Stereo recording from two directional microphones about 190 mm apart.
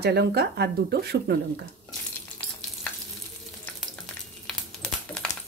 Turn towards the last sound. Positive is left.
turn(degrees=5)  # may be behind; listen again after turning